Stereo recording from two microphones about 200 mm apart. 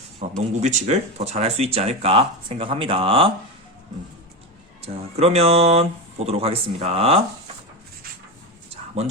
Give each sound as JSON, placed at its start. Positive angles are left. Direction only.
{"t": 0.2, "sound": "speech", "side_deg": -35}
{"t": 4.8, "sound": "speech", "side_deg": -30}